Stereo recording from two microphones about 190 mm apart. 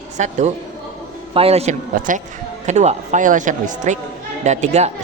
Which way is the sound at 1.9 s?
45° right (ahead or behind).